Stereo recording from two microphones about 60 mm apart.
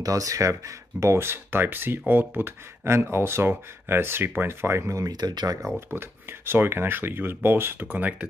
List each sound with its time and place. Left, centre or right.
0.0 s speech: right
5.0 s speech: right
5.9 s speech: right
8.0 s speech: right